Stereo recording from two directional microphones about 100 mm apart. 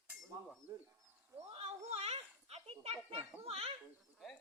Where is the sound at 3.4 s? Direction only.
75° right (ahead or behind).